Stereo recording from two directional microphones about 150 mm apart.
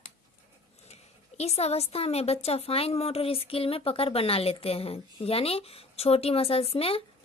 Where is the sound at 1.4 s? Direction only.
45° left (ahead or behind).